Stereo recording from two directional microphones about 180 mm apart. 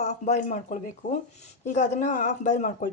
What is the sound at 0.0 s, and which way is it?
Speech, 40° left (ahead or behind).